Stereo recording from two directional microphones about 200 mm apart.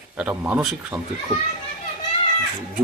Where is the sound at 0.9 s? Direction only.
20° right (ahead or behind).